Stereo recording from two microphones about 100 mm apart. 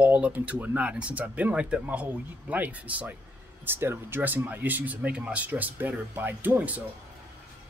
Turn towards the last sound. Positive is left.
turn(degrees=-15)  # may be behind; listen again after turning